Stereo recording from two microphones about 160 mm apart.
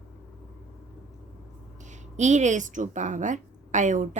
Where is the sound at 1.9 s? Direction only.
50° right (ahead or behind).